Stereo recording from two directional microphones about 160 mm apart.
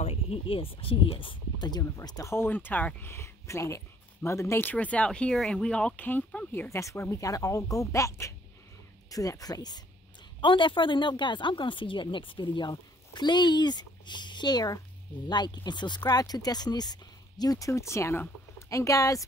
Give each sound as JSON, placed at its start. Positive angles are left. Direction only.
{"t": 0.0, "sound": "speech", "side_deg": 40}